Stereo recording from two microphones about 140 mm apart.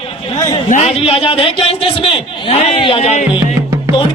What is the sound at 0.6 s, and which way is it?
Speech, 65° left (ahead or behind).